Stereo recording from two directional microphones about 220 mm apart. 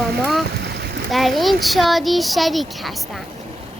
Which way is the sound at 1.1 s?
Centre (ahead or behind).